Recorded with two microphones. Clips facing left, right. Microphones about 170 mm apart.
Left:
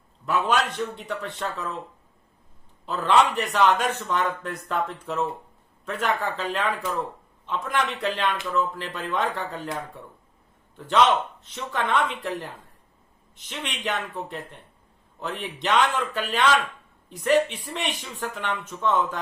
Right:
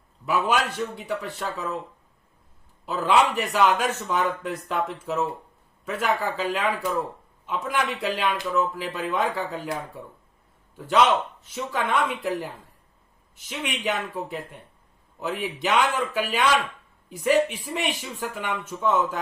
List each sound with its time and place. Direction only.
0.3 s a man's voice: 10° right (ahead or behind)
2.8 s a man's voice: 10° right (ahead or behind)